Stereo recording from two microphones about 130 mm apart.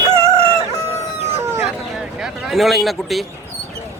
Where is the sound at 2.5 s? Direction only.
Centre (ahead or behind).